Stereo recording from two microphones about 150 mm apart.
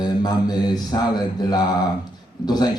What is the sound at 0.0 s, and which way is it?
A man's voice, 30° left (ahead or behind).